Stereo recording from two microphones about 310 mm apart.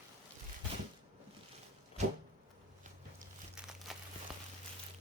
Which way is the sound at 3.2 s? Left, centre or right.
Centre.